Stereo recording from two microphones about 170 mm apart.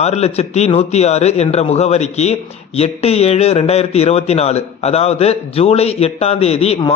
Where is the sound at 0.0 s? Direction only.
40° left (ahead or behind).